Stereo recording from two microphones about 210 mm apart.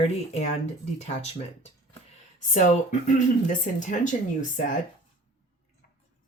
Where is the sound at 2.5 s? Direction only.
35° left (ahead or behind).